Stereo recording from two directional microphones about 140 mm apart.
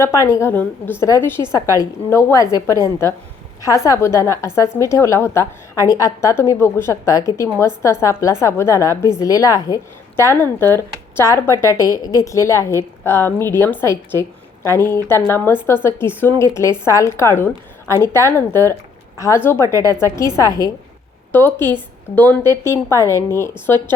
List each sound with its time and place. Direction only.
0.0 s a woman's voice: 20° left (ahead or behind)